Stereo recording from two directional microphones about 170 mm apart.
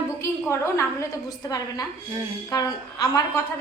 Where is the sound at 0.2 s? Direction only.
15° left (ahead or behind).